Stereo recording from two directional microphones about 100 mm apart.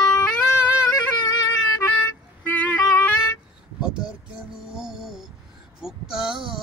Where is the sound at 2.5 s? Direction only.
15° left (ahead or behind).